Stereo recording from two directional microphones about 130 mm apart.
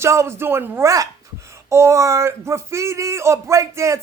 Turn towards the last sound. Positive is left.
turn(degrees=-25)  # may be behind; listen again after turning